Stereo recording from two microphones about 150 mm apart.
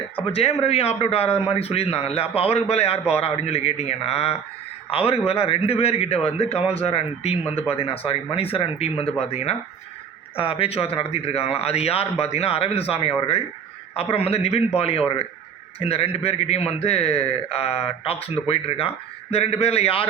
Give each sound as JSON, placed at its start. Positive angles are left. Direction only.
{"t": 0.3, "sound": "a man's voice", "side_deg": 40}